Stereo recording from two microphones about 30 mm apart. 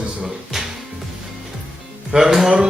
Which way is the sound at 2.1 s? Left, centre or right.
Centre.